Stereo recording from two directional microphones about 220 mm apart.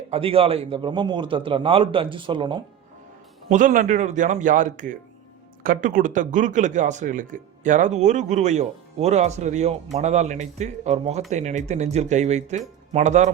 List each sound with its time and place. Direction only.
0.1 s a man's voice: 25° right (ahead or behind)
3.5 s speech: 35° right (ahead or behind)